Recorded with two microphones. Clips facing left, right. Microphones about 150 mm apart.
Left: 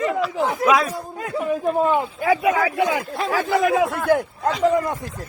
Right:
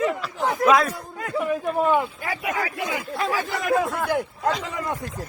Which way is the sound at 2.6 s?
80° left.